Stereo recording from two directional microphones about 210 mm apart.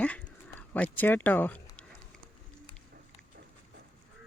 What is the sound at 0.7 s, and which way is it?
Speech, 10° left (ahead or behind).